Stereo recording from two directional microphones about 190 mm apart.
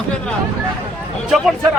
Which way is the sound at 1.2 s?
Centre (ahead or behind).